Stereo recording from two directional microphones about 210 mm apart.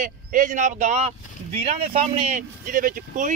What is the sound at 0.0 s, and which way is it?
Speech, 40° right (ahead or behind).